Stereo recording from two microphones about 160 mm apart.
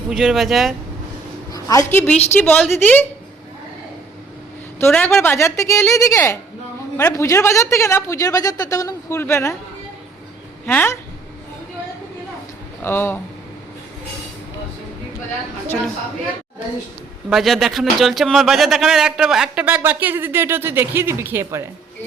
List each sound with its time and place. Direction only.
0.1 s a man's voice: centre (ahead or behind)
1.5 s a woman's voice: 20° left (ahead or behind)
4.8 s a woman's voice: 10° left (ahead or behind)
10.7 s a woman's voice: 10° left (ahead or behind)
12.8 s a woman's voice: 15° left (ahead or behind)
17.2 s a man's voice: centre (ahead or behind)